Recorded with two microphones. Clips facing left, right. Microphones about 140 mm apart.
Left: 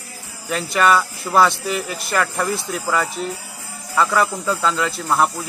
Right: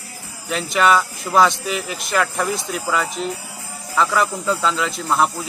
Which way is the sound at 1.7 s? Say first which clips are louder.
Left 1 dB; 15° right (ahead or behind).